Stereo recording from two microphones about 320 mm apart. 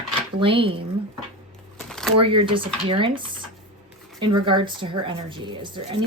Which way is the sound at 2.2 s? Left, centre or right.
Centre.